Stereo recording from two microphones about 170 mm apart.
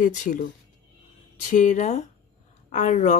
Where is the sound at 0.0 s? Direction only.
50° left (ahead or behind).